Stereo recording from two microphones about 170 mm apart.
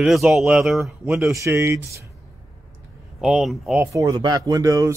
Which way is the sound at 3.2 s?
Centre (ahead or behind).